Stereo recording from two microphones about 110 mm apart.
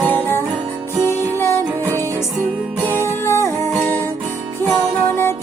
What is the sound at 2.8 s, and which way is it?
Music, 20° left (ahead or behind).